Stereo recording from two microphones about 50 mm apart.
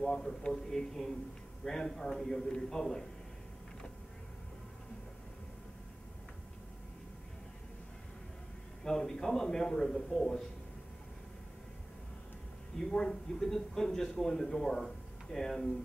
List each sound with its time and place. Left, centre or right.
0.0 s a man's voice: centre
8.8 s a man's voice: centre
12.7 s a man's voice: centre